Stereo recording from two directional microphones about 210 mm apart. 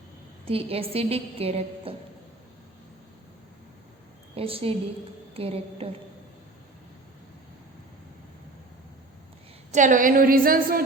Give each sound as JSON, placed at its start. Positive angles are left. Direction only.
{"t": 0.4, "sound": "a woman's voice", "side_deg": -25}
{"t": 4.4, "sound": "a woman's voice", "side_deg": -25}
{"t": 9.7, "sound": "a woman's voice", "side_deg": -35}